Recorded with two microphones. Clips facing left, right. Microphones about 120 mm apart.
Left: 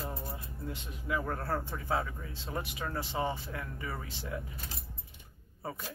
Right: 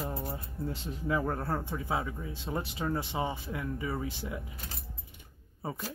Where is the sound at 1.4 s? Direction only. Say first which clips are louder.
Right 1 dB; 15° right (ahead or behind).